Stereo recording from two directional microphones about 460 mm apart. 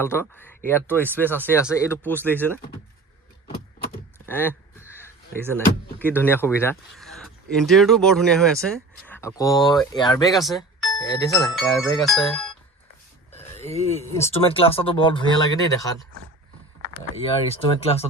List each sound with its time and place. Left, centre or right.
0.0 s speech: centre
4.3 s a sound: centre
5.4 s speech: centre
13.9 s speech: centre
17.2 s speech: centre